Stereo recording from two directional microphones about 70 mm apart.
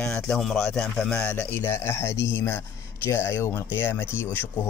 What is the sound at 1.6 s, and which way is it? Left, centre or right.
Speech, left.